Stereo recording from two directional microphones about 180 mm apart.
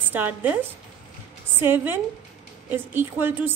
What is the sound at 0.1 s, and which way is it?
A woman's voice, 10° right (ahead or behind).